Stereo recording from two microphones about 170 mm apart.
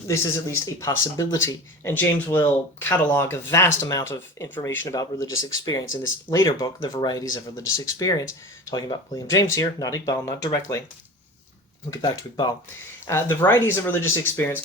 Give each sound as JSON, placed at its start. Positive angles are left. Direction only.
{"t": 0.1, "sound": "speech", "side_deg": 15}
{"t": 13.1, "sound": "speech", "side_deg": 15}